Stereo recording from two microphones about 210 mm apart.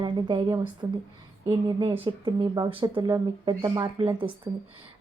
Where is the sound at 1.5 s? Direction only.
25° right (ahead or behind).